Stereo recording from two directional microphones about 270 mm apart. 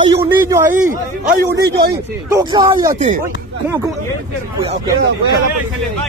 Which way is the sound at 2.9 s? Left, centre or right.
Right.